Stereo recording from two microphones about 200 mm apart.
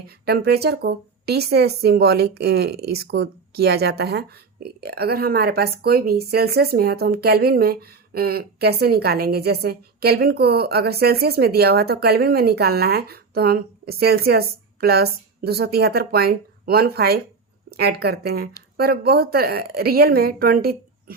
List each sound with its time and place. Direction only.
0.3 s a woman's voice: 50° right (ahead or behind)